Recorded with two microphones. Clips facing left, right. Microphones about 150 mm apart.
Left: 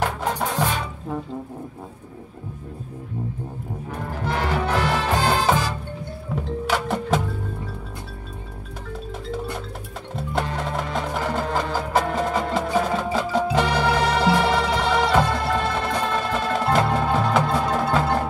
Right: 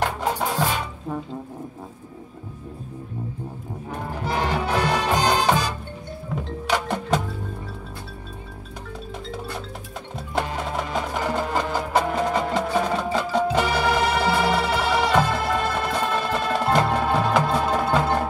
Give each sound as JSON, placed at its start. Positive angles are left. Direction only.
{"t": 0.0, "sound": "music", "side_deg": 0}
{"t": 4.2, "sound": "music", "side_deg": -15}
{"t": 6.3, "sound": "music", "side_deg": 5}
{"t": 10.1, "sound": "music", "side_deg": 0}